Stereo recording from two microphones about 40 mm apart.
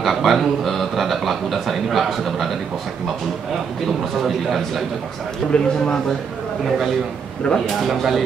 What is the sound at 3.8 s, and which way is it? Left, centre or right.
A man's voice, centre.